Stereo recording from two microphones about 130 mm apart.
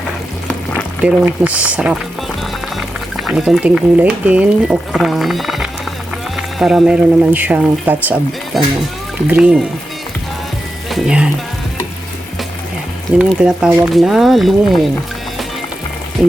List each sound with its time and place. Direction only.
1.0 s speech: 10° right (ahead or behind)
3.2 s speech: centre (ahead or behind)
8.5 s speech: centre (ahead or behind)
10.8 s speech: centre (ahead or behind)
13.1 s speech: 10° right (ahead or behind)